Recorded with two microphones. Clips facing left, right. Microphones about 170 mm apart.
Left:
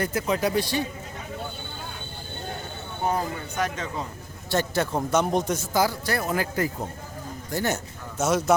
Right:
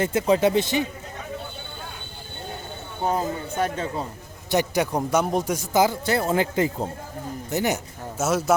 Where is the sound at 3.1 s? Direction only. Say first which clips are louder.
Right 3 dB; 30° right (ahead or behind).